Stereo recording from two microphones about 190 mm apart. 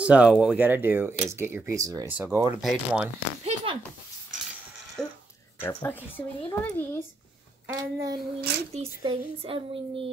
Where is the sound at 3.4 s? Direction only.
30° right (ahead or behind).